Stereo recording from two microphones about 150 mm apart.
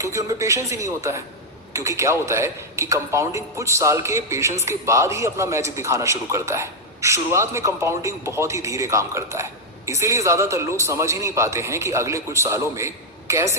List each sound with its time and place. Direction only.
0.0 s a man's voice: 20° right (ahead or behind)